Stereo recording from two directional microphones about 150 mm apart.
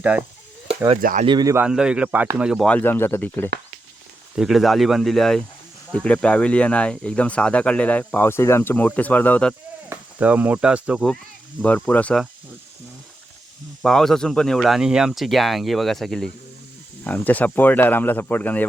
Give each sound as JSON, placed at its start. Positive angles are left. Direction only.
{"t": 0.0, "sound": "speech", "side_deg": -10}
{"t": 1.2, "sound": "speech", "side_deg": -30}
{"t": 1.5, "sound": "speech", "side_deg": -5}
{"t": 2.6, "sound": "speech", "side_deg": 10}
{"t": 4.4, "sound": "speech", "side_deg": 0}
{"t": 9.9, "sound": "speech", "side_deg": -10}
{"t": 11.6, "sound": "speech", "side_deg": 10}
{"t": 13.8, "sound": "speech", "side_deg": 5}